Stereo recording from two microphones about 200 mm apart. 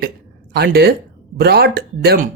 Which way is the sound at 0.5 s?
55° right (ahead or behind).